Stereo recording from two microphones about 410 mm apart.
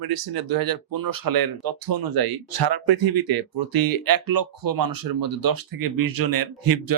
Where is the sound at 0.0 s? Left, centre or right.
Right.